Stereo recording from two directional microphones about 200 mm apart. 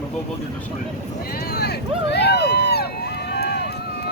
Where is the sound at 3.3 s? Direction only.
55° left (ahead or behind).